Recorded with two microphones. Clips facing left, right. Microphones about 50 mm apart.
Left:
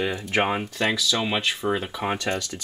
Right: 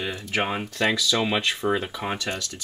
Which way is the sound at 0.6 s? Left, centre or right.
Centre.